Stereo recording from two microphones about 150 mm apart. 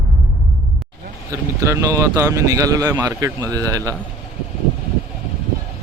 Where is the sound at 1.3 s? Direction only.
20° right (ahead or behind).